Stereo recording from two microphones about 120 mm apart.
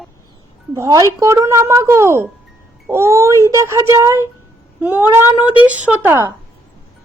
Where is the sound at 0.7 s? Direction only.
25° right (ahead or behind).